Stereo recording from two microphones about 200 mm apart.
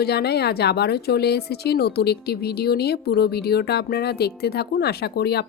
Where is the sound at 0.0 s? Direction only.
55° left (ahead or behind).